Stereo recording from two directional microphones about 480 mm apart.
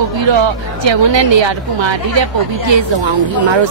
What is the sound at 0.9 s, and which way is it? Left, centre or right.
A woman's voice, right.